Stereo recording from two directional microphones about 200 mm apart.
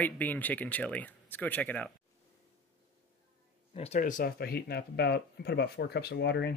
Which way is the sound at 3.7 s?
30° left (ahead or behind).